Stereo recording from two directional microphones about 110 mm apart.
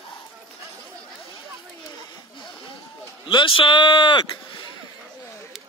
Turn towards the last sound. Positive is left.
turn(degrees=45)  # may be behind; listen again after turning